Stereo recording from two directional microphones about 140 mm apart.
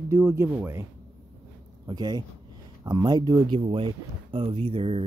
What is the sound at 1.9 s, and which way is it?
A man's voice, 30° right (ahead or behind).